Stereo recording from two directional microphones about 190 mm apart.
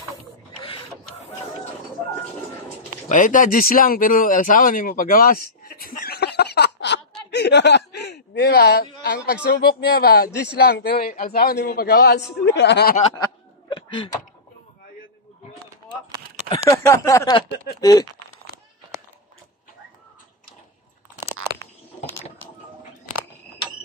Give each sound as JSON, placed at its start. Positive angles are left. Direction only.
{"t": 3.1, "sound": "speech", "side_deg": 45}
{"t": 13.1, "sound": "a sound", "side_deg": 20}
{"t": 16.4, "sound": "speech", "side_deg": 15}